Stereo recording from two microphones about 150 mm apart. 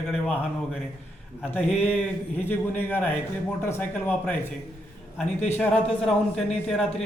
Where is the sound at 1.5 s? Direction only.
10° left (ahead or behind).